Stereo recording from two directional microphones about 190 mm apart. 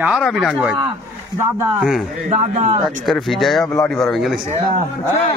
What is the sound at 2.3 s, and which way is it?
Speech, 35° right (ahead or behind).